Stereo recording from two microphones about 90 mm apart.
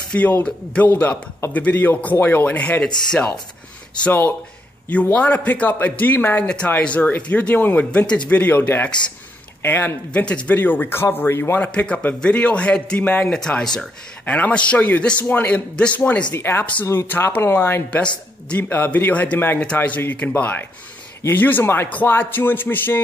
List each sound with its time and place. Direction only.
0.1 s a man's voice: 15° left (ahead or behind)
4.8 s a man's voice: 15° left (ahead or behind)
11.6 s a man's voice: 10° left (ahead or behind)
13.3 s a man's voice: 10° left (ahead or behind)